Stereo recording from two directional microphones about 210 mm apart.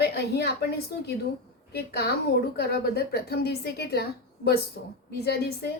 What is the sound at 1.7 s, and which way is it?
A woman's voice, 50° left (ahead or behind).